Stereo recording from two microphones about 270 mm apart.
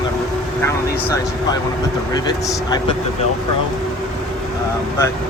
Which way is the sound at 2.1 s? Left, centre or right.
Centre.